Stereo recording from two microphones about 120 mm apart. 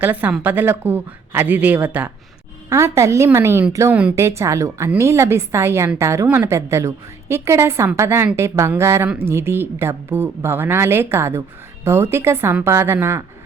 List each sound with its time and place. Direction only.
0.0 s speech: 15° right (ahead or behind)
2.6 s a woman's voice: 25° right (ahead or behind)